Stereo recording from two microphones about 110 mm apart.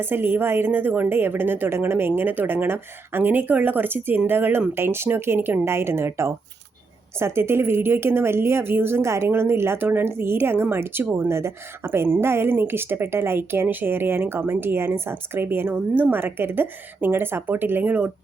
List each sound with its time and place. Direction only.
0.0 s speech: 20° right (ahead or behind)